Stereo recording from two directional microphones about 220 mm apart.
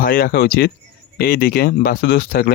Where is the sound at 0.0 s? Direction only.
40° left (ahead or behind).